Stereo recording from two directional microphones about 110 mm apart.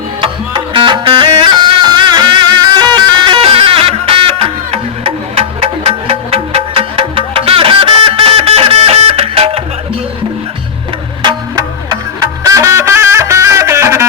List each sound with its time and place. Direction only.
0.2 s music: 50° right (ahead or behind)
11.2 s music: 45° right (ahead or behind); by 14.0 s 25° right (ahead or behind)